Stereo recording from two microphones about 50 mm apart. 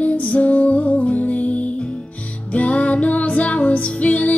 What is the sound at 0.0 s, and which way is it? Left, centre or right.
Music, left.